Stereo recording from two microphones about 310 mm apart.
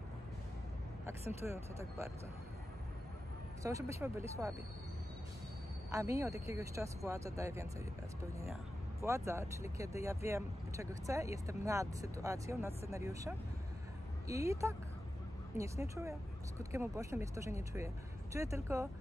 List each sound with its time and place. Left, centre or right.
1.0 s speech: centre
3.6 s speech: centre
5.9 s speech: centre
9.0 s speech: centre